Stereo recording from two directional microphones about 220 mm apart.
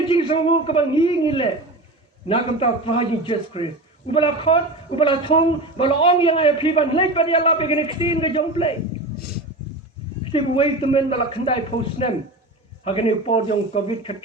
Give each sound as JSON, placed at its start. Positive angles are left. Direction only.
{"t": 0.0, "sound": "a man's voice", "side_deg": 20}
{"t": 10.3, "sound": "a man's voice", "side_deg": 25}